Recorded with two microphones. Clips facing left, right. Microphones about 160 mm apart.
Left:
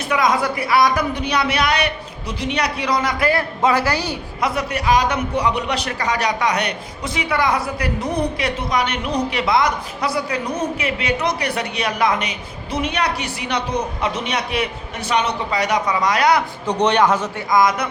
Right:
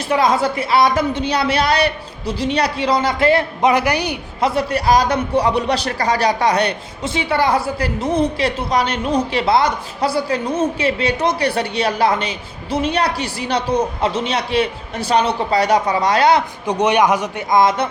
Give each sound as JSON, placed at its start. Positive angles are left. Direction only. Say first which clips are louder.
{"t": 0.1, "sound": "speech", "louder": "right 3 dB", "side_deg": -30}
{"t": 4.4, "sound": "a man's voice", "louder": "right 4 dB", "side_deg": -30}
{"t": 16.6, "sound": "speech", "louder": "right 1 dB", "side_deg": -10}
{"t": 17.5, "sound": "speech", "louder": "right 2 dB", "side_deg": -25}